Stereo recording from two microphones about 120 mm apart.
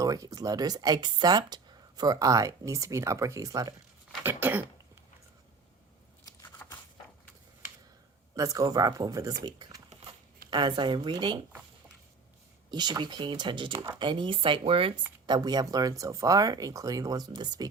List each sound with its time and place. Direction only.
0.0 s speech: 30° right (ahead or behind)
4.2 s cough: 15° right (ahead or behind)
6.6 s a sound: 20° left (ahead or behind)
8.4 s speech: 30° right (ahead or behind)
12.7 s speech: 35° right (ahead or behind)
15.3 s speech: 35° right (ahead or behind)